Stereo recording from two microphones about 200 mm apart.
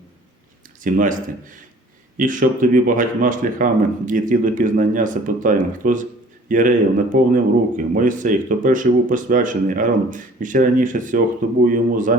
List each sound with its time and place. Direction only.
0.9 s speech: 40° right (ahead or behind)